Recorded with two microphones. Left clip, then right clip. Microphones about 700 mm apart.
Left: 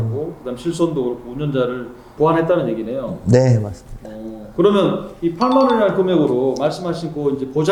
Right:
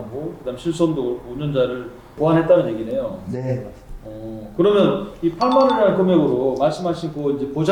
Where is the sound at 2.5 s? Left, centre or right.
Left.